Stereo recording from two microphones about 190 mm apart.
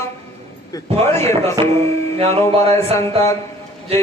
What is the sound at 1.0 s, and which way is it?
Speech, 15° left (ahead or behind).